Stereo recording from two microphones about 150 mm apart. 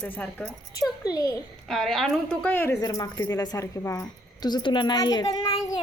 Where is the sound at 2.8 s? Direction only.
25° left (ahead or behind).